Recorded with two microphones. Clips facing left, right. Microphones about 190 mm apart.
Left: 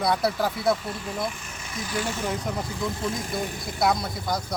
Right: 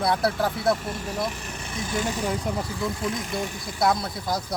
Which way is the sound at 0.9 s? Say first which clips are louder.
Right 1 dB; 45° right (ahead or behind).